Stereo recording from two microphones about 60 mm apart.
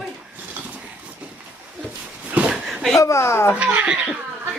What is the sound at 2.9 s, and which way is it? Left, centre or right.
Speech, left.